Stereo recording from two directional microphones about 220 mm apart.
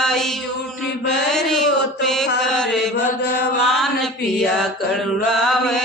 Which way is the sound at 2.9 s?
50° left (ahead or behind).